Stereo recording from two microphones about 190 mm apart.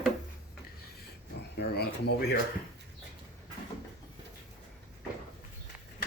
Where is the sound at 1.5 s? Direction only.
60° left (ahead or behind).